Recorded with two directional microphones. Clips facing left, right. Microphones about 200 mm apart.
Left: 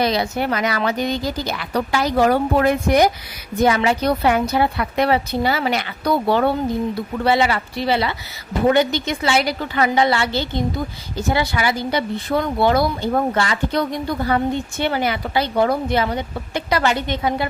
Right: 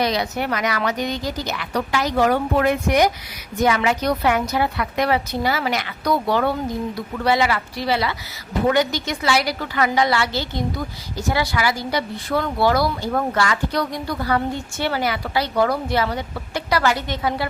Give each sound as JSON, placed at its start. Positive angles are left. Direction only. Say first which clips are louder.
{"t": 0.0, "sound": "a woman's voice", "louder": "left 2 dB", "side_deg": 30}